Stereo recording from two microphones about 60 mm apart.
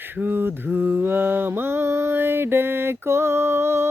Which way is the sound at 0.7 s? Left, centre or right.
Right.